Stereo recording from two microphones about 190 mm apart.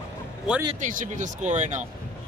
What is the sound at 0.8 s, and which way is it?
Speech, 40° right (ahead or behind).